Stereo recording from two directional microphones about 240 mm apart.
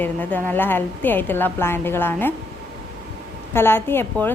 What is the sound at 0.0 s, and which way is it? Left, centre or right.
A woman's voice, centre.